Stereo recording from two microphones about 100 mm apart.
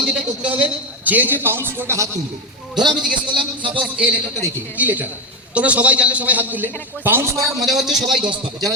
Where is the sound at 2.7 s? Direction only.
50° right (ahead or behind).